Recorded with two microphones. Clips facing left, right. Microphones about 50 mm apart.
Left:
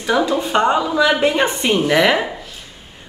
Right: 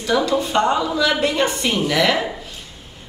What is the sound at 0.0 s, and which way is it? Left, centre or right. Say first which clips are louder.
A woman's voice: left 1 dB; centre.